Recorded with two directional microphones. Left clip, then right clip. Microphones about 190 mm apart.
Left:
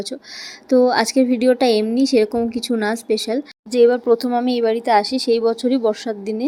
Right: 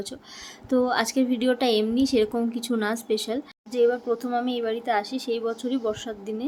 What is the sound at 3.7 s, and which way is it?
Speech, 40° left (ahead or behind).